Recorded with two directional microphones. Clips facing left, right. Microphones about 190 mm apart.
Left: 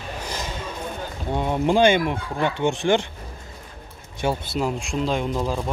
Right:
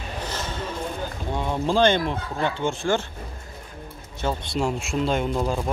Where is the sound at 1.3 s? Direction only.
15° left (ahead or behind).